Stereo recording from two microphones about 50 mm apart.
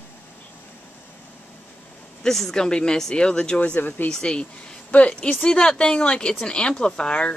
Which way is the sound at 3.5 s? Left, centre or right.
Left.